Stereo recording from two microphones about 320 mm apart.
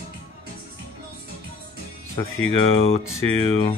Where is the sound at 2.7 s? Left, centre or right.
Centre.